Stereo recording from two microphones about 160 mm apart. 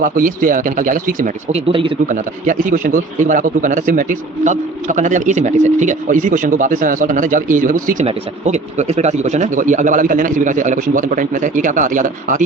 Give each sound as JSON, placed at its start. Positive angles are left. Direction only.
{"t": 0.0, "sound": "speech", "side_deg": -60}
{"t": 1.5, "sound": "speech", "side_deg": -35}
{"t": 2.0, "sound": "speech", "side_deg": -55}
{"t": 8.0, "sound": "speech", "side_deg": -45}